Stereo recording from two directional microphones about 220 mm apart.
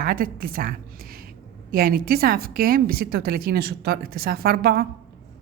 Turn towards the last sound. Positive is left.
turn(degrees=-45)  # may be behind; listen again after turning